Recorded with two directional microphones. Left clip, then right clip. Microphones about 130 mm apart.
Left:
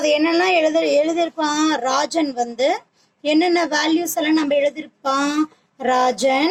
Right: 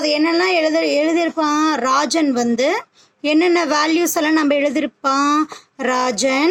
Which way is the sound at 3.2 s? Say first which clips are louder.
Right 2 dB; 25° right (ahead or behind).